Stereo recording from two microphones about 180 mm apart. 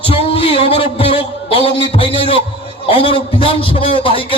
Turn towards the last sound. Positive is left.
turn(degrees=30)  # may be behind; listen again after turning